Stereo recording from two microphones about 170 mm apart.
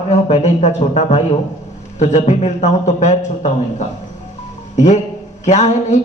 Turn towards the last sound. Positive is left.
turn(degrees=45)  # may be behind; listen again after turning